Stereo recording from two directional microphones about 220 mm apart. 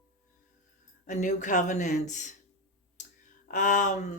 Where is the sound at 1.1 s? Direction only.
35° left (ahead or behind).